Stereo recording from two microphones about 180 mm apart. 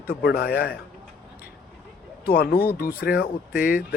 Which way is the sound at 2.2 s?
60° left (ahead or behind).